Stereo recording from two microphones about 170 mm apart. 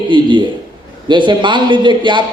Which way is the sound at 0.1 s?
25° right (ahead or behind).